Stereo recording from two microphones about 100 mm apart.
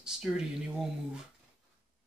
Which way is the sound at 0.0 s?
5° right (ahead or behind).